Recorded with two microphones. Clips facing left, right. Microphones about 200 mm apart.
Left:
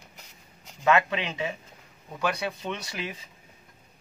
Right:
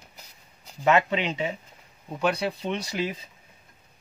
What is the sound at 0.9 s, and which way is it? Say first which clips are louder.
Speech: right 2 dB; 25° right (ahead or behind).